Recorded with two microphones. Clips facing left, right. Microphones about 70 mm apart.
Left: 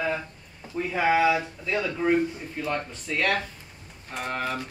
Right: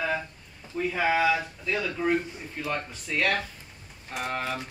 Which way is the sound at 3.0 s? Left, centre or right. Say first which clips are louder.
Even; centre.